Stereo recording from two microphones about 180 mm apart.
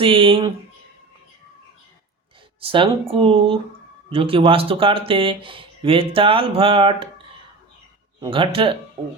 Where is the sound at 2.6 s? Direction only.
30° right (ahead or behind).